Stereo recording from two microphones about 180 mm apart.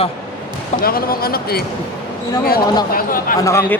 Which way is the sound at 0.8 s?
55° left (ahead or behind).